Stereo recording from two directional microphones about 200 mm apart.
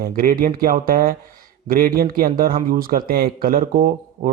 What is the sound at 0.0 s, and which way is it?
A man's voice, 45° right (ahead or behind).